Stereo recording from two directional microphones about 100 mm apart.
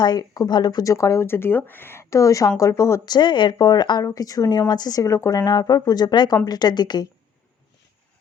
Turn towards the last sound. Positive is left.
turn(degrees=45)  # may be behind; listen again after turning